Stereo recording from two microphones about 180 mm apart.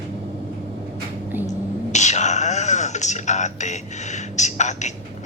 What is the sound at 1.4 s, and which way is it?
Speech, 40° left (ahead or behind).